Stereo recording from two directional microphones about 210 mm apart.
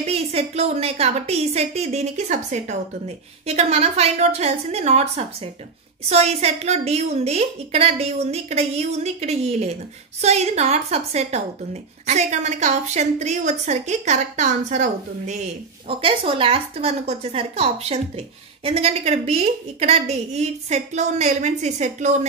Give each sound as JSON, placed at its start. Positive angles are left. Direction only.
{"t": 0.0, "sound": "a woman's voice", "side_deg": -30}